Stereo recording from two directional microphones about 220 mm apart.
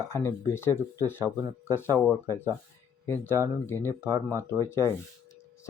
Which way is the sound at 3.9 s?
15° right (ahead or behind).